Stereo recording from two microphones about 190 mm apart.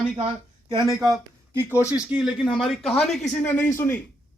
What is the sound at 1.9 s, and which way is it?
Speech, 5° right (ahead or behind).